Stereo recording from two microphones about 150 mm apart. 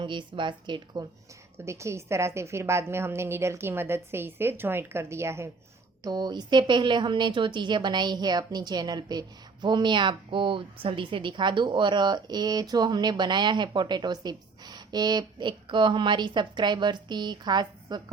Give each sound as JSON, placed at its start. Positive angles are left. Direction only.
{"t": 0.0, "sound": "speech", "side_deg": -30}
{"t": 1.5, "sound": "a woman's voice", "side_deg": -20}